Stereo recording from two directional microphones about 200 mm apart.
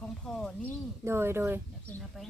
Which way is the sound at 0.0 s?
5° left (ahead or behind).